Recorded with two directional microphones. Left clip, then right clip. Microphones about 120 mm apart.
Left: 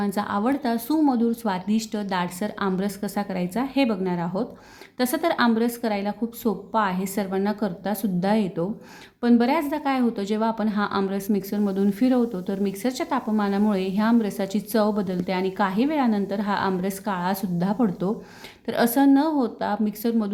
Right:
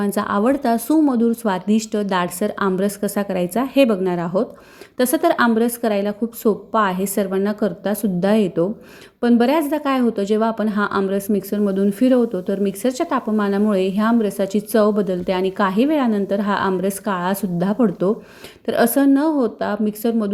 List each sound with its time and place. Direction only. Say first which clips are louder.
0.0 s a woman's voice: right 6 dB; 40° right (ahead or behind)